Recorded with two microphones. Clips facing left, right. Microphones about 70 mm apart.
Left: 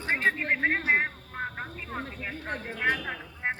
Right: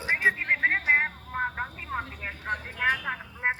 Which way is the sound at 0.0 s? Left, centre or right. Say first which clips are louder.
Right 1 dB; centre.